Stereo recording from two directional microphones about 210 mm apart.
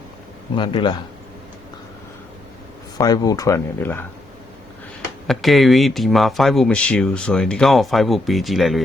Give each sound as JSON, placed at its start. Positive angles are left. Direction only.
{"t": 0.5, "sound": "speech", "side_deg": 25}
{"t": 3.0, "sound": "speech", "side_deg": 20}
{"t": 5.3, "sound": "speech", "side_deg": 0}